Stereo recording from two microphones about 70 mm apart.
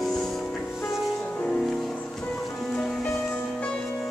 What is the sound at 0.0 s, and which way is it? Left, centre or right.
Music, centre.